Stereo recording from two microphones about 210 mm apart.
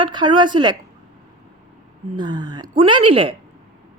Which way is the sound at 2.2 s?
20° right (ahead or behind).